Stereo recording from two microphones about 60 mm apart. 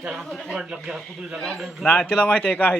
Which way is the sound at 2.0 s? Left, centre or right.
Left.